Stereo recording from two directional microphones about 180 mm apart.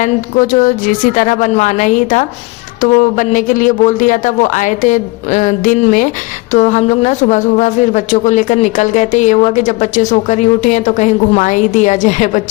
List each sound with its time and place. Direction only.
0.0 s speech: 45° left (ahead or behind)